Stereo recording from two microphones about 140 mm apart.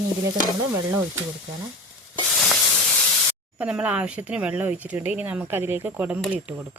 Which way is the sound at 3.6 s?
5° right (ahead or behind).